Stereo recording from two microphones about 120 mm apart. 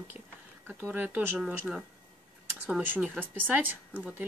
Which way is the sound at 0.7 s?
15° right (ahead or behind).